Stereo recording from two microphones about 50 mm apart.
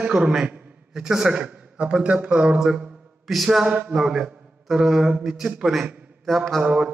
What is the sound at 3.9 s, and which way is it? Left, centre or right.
A man's voice, centre.